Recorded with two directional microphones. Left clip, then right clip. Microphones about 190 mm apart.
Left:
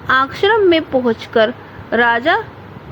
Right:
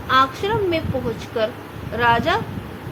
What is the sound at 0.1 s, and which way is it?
A woman's voice, 40° left (ahead or behind).